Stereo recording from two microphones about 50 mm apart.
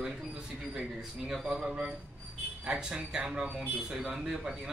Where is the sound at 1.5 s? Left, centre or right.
Centre.